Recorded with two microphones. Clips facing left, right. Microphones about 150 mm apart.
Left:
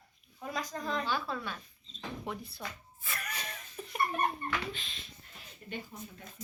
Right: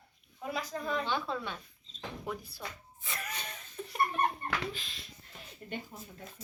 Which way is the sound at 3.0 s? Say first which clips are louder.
Right 1 dB; 25° right (ahead or behind).